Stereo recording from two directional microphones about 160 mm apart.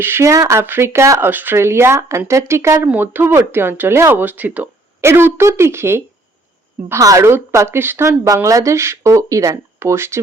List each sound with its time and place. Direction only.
0.0 s speech: 15° right (ahead or behind)